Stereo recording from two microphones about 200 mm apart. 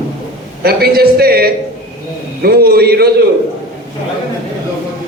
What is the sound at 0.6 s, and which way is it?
A man's voice, 50° right (ahead or behind).